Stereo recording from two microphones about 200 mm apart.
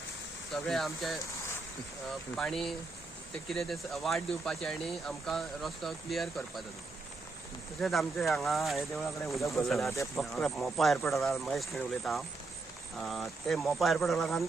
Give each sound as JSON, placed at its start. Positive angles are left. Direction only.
{"t": 0.5, "sound": "speech", "side_deg": 0}
{"t": 2.3, "sound": "speech", "side_deg": 0}
{"t": 7.8, "sound": "speech", "side_deg": 0}